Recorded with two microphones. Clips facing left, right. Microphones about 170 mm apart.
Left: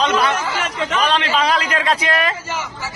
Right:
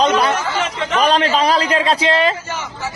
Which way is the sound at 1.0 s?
40° right (ahead or behind).